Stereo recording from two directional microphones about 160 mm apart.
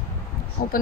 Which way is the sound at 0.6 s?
55° left (ahead or behind).